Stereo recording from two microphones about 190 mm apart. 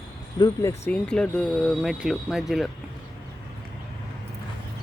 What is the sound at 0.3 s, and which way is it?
Speech, 20° left (ahead or behind).